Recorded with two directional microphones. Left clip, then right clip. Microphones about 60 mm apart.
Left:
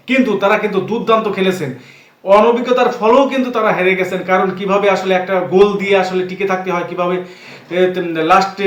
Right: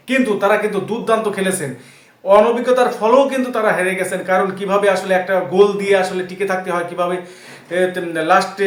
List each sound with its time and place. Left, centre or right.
0.1 s a man's voice: right